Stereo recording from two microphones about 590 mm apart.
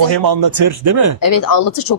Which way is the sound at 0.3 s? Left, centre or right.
Right.